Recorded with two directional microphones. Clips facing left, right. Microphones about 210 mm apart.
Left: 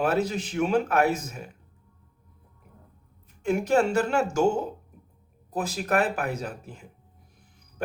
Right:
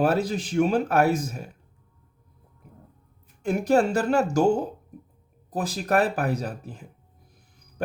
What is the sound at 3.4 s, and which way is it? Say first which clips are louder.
Speech: right 1 dB; 35° right (ahead or behind).